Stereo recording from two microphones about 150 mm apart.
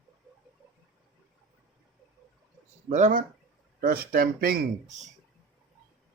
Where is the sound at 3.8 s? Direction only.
75° right (ahead or behind).